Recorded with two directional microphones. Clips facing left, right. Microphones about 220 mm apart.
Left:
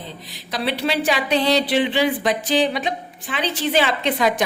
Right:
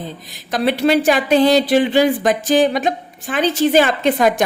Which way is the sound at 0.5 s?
45° right (ahead or behind).